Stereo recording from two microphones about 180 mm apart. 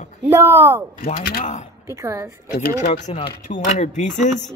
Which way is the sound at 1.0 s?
55° left (ahead or behind).